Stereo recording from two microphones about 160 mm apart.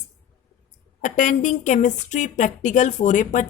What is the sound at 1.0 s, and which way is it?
Speech, 50° left (ahead or behind).